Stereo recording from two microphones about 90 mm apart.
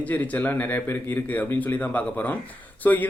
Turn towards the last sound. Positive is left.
turn(degrees=20)  # may be behind; listen again after turning